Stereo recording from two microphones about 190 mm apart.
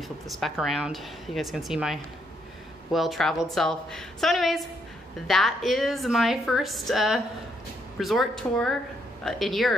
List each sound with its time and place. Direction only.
0.3 s a woman's voice: centre (ahead or behind)